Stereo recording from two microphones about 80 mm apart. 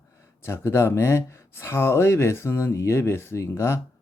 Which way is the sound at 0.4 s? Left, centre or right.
Left.